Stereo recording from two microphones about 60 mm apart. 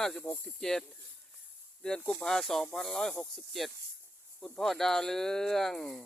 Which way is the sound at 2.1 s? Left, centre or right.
Centre.